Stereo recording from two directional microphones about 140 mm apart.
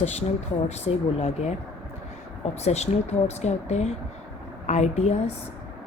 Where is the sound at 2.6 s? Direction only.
50° left (ahead or behind).